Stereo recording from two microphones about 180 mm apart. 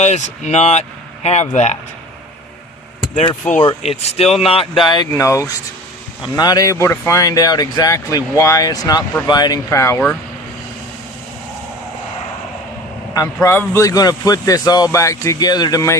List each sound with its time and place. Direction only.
0.0 s speech: 40° left (ahead or behind)
3.4 s speech: 10° left (ahead or behind)
3.8 s speech: 35° left (ahead or behind); by 10.0 s 15° left (ahead or behind)
13.1 s speech: 15° left (ahead or behind)